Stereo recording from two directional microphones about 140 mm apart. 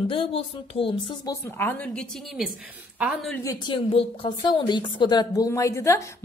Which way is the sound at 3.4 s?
25° left (ahead or behind).